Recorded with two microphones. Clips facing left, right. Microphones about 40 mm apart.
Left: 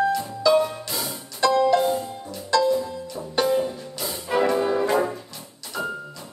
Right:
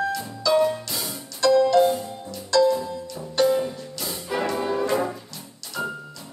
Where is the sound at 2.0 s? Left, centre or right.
Centre.